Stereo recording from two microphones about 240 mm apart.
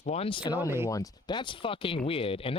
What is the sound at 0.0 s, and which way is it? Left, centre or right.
Speech, left.